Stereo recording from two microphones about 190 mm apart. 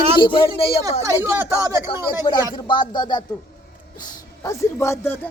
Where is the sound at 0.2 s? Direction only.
25° left (ahead or behind).